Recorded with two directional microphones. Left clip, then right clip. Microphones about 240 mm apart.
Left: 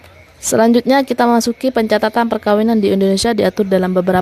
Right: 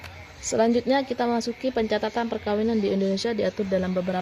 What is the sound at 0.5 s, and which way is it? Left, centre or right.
Speech, left.